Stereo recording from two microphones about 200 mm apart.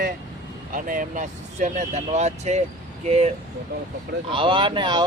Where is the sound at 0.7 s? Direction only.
40° right (ahead or behind).